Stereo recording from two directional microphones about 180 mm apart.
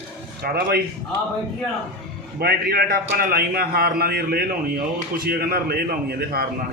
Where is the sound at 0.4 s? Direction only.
60° right (ahead or behind).